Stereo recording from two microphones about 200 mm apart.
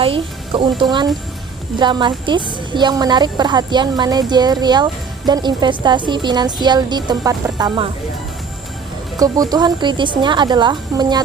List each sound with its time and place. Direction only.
0.0 s a woman's voice: 25° right (ahead or behind)
9.1 s a woman's voice: 20° right (ahead or behind)